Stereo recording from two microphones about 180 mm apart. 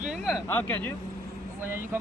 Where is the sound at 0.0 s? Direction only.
5° right (ahead or behind).